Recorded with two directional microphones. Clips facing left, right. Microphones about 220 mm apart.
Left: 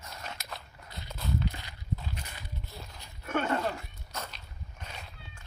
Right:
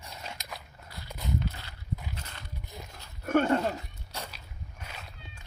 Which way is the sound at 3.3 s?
40° right (ahead or behind).